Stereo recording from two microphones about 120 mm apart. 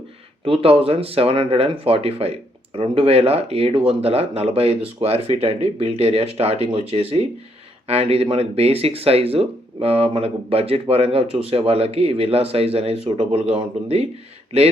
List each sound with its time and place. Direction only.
0.4 s speech: 50° right (ahead or behind)